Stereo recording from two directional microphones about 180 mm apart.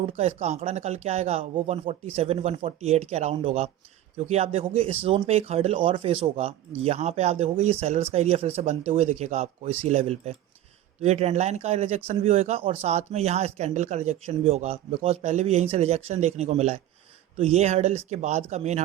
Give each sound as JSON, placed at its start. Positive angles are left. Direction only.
{"t": 0.2, "sound": "speech", "side_deg": -35}